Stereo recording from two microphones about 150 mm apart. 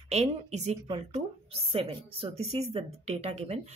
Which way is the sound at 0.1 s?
45° right (ahead or behind).